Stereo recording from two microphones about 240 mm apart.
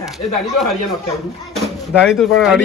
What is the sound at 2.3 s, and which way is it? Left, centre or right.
Speech, centre.